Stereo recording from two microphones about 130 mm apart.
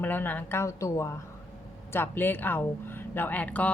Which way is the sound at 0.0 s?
15° left (ahead or behind).